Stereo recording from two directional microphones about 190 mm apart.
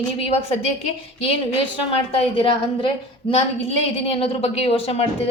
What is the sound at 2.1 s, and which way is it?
Speech, 30° left (ahead or behind).